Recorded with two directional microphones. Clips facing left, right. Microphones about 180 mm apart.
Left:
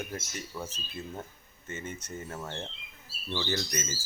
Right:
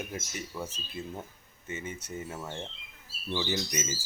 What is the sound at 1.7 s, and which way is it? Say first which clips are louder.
Speech: right 1 dB; 10° right (ahead or behind).